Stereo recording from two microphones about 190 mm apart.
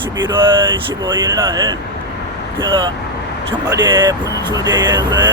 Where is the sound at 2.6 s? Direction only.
25° right (ahead or behind).